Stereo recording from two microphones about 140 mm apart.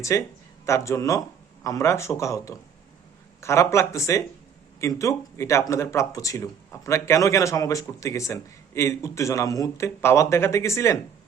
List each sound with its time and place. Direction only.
0.1 s speech: 20° left (ahead or behind)